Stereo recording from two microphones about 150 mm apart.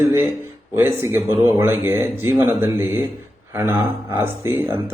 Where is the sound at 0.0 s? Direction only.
20° right (ahead or behind).